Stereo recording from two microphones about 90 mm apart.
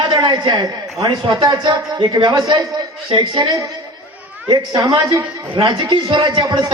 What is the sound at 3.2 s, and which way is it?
Speech, 65° right (ahead or behind).